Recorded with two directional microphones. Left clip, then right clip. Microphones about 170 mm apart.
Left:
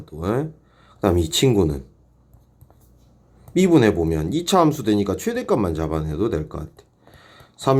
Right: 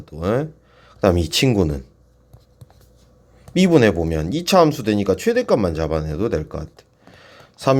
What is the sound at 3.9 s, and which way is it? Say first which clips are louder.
Speech: even; 35° right (ahead or behind).